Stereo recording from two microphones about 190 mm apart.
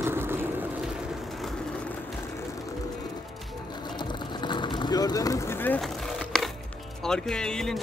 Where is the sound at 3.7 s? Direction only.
25° left (ahead or behind); by 6.5 s centre (ahead or behind).